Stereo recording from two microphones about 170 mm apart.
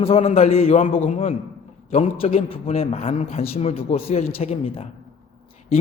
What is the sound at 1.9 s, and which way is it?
A man's voice, 35° left (ahead or behind).